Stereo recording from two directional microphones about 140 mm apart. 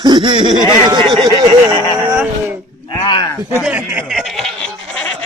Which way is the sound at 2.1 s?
10° right (ahead or behind).